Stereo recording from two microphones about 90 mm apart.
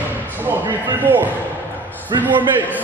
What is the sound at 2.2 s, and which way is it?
Speech, 20° right (ahead or behind).